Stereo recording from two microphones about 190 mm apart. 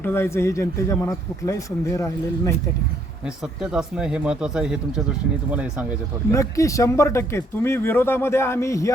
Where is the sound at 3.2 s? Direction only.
5° right (ahead or behind).